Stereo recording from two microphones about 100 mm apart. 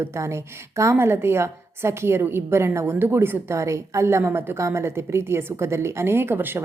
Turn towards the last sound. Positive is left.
turn(degrees=-20)  # may be behind; listen again after turning